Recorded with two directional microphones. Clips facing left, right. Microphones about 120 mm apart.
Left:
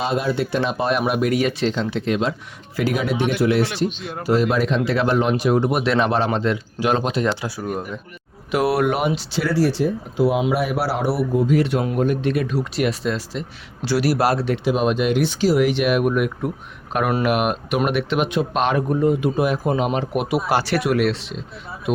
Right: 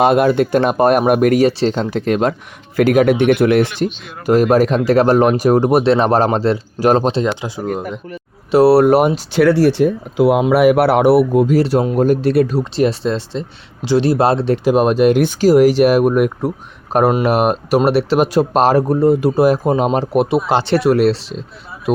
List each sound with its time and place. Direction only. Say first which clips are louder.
0.0 s speech: right 9 dB; 60° right (ahead or behind)
1.5 s speech: right 5 dB; 35° right (ahead or behind)
7.3 s speech: right 3 dB; 20° right (ahead or behind)
8.4 s speech: right 9 dB; 30° right (ahead or behind)
9.4 s speech: right 8 dB; 65° right (ahead or behind)
11.5 s speech: right 5 dB; 35° right (ahead or behind)
14.5 s speech: right 6 dB; 45° right (ahead or behind)
20.5 s speech: right 6 dB; 25° right (ahead or behind)